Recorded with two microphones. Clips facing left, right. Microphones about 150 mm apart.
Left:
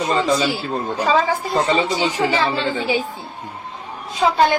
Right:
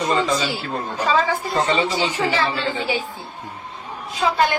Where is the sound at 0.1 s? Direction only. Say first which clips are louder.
Left 4 dB; 35° left (ahead or behind).